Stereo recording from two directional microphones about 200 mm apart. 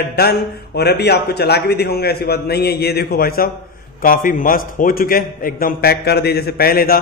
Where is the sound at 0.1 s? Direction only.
55° left (ahead or behind).